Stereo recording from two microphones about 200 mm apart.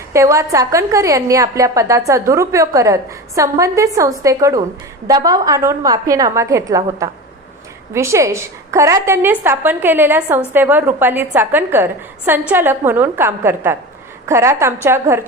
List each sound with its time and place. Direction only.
0.1 s a woman's voice: 15° right (ahead or behind)